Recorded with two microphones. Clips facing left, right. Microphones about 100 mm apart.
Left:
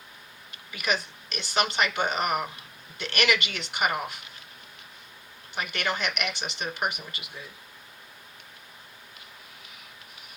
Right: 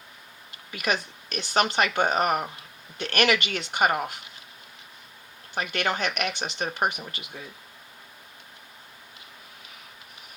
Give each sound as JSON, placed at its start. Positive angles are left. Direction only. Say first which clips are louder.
{"t": 0.7, "sound": "speech", "louder": "right 1 dB", "side_deg": -45}
{"t": 5.5, "sound": "speech", "louder": "right 3 dB", "side_deg": -45}